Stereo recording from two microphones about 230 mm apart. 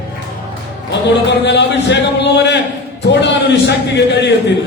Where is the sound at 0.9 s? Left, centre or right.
Left.